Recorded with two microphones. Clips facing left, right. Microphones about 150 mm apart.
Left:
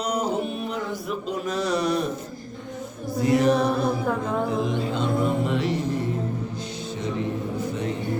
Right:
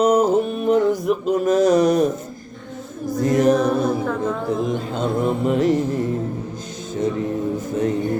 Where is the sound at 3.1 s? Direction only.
45° right (ahead or behind).